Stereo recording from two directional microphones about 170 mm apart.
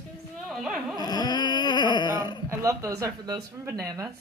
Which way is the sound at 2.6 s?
20° right (ahead or behind).